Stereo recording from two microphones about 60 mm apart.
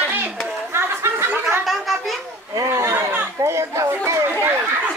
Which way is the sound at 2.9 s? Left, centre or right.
Right.